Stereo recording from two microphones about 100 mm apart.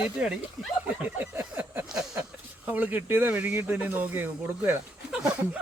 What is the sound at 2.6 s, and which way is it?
Speech, 15° right (ahead or behind).